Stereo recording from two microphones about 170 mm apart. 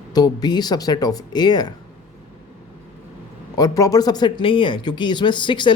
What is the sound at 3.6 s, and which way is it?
Speech, 20° left (ahead or behind).